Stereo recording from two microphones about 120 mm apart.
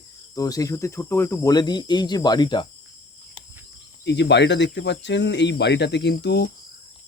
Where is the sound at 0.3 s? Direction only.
30° left (ahead or behind).